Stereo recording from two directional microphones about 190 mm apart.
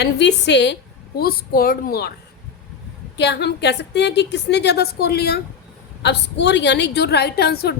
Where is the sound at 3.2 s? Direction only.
60° left (ahead or behind).